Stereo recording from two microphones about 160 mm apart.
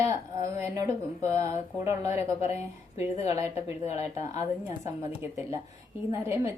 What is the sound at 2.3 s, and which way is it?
Speech, 40° left (ahead or behind).